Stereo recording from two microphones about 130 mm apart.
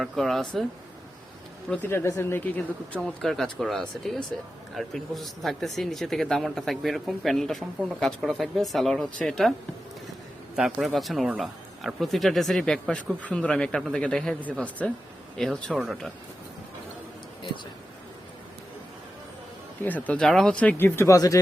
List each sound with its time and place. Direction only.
0.0 s speech: centre (ahead or behind)
1.7 s speech: 20° left (ahead or behind)
3.2 s speech: 5° left (ahead or behind)
10.5 s speech: centre (ahead or behind)
19.8 s speech: 10° left (ahead or behind)